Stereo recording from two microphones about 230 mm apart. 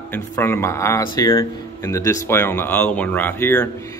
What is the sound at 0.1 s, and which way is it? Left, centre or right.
Speech, centre.